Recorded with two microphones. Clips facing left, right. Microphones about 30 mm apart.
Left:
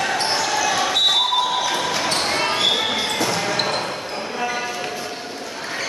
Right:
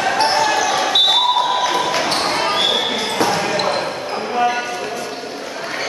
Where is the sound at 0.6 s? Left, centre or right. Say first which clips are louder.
Right 3 dB; centre.